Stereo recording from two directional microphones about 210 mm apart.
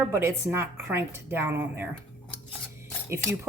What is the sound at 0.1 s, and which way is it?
Speech, 10° right (ahead or behind).